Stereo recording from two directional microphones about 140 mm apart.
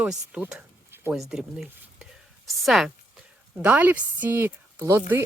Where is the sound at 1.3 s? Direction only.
5° right (ahead or behind).